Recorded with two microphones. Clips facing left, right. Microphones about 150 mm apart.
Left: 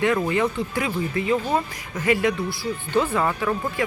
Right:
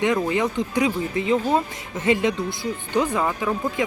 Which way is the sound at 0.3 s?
15° right (ahead or behind).